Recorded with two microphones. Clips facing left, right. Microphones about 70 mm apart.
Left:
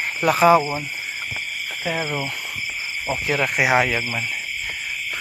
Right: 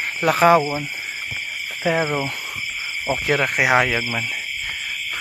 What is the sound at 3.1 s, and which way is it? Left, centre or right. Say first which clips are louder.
Speech: right 2 dB; right.